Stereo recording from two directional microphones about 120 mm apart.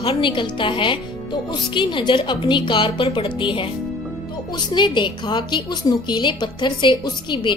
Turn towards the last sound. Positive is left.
turn(degrees=40)  # may be behind; listen again after turning